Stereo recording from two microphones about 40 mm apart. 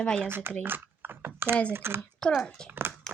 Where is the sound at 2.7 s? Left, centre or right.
Right.